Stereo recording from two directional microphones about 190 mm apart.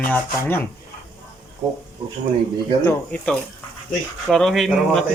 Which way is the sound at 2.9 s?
5° left (ahead or behind).